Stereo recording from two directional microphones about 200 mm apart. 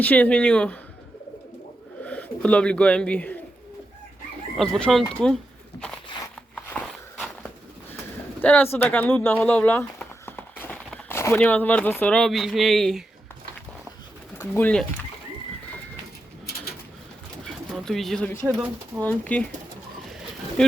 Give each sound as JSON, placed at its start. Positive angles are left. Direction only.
{"t": 0.0, "sound": "speech", "side_deg": 5}
{"t": 2.0, "sound": "speech", "side_deg": 5}
{"t": 4.5, "sound": "speech", "side_deg": 0}
{"t": 6.1, "sound": "a sound", "side_deg": 25}
{"t": 6.7, "sound": "walk", "side_deg": 5}
{"t": 8.4, "sound": "speech", "side_deg": 10}
{"t": 14.3, "sound": "speech", "side_deg": 10}
{"t": 17.4, "sound": "pigeon", "side_deg": 0}
{"t": 19.0, "sound": "speech", "side_deg": 5}
{"t": 20.1, "sound": "bird", "side_deg": 0}